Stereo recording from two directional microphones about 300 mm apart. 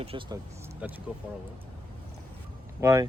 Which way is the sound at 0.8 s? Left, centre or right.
Centre.